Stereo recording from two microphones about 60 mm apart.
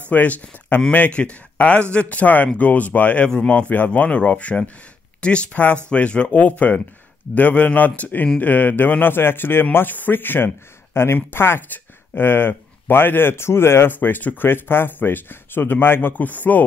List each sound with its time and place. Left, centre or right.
0.1 s speech: left